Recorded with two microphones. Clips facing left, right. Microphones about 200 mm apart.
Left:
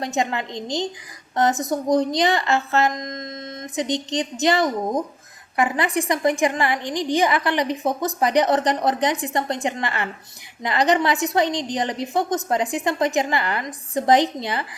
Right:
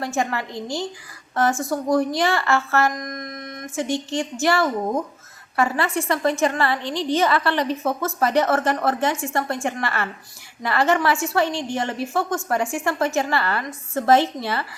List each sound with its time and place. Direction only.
0.0 s a woman's voice: 20° left (ahead or behind)